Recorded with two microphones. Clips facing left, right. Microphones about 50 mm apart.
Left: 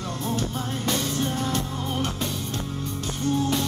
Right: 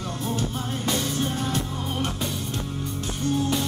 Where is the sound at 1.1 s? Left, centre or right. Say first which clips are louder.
Even; centre.